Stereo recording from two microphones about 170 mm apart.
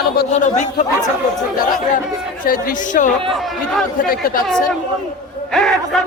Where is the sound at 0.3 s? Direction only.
45° left (ahead or behind).